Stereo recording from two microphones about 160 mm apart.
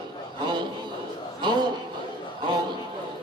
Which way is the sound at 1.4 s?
30° right (ahead or behind).